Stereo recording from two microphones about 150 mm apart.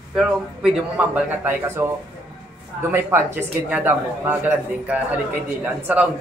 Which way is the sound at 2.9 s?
15° right (ahead or behind).